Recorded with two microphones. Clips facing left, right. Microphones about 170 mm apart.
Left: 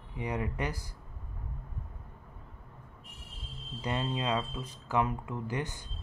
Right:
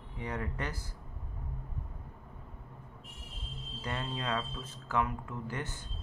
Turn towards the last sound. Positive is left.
turn(degrees=15)  # may be behind; listen again after turning